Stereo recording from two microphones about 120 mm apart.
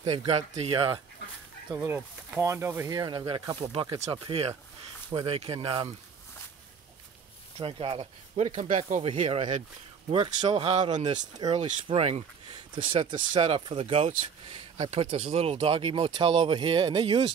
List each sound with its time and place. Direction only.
0.0 s speech: 40° right (ahead or behind)
0.3 s speech: 60° right (ahead or behind)
2.0 s speech: 20° right (ahead or behind)
2.9 s speech: 35° right (ahead or behind); by 5.9 s 55° right (ahead or behind)
7.5 s speech: 50° right (ahead or behind)
8.4 s speech: 90° right
9.0 s speech: 55° right (ahead or behind)
10.1 s speech: 40° right (ahead or behind)
10.8 s speech: 80° right
11.1 s speech: 35° right (ahead or behind)
11.9 s speech: 55° right (ahead or behind)
12.7 s speech: 40° right (ahead or behind)